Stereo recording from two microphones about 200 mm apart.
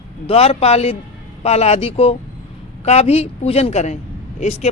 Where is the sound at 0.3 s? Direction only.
30° left (ahead or behind).